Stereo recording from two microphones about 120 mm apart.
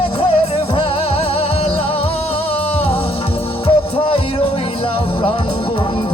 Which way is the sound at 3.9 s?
50° left (ahead or behind).